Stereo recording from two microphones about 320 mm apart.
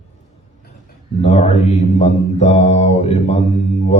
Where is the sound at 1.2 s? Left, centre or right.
Left.